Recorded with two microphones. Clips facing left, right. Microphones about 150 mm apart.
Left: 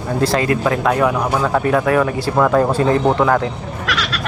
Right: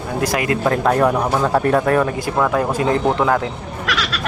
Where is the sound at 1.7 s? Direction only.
35° right (ahead or behind).